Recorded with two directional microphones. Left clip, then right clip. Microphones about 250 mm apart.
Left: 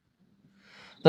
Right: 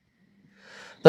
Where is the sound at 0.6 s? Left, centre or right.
Right.